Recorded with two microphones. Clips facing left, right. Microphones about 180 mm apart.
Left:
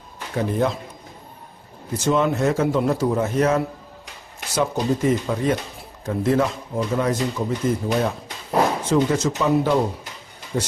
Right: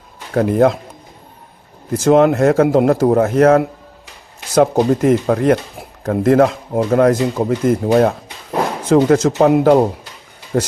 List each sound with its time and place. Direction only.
0.3 s a man's voice: 65° right (ahead or behind)
2.0 s speech: 80° right
4.8 s speech: 60° right (ahead or behind)
8.9 s speech: 85° right; by 10.7 s 55° right (ahead or behind)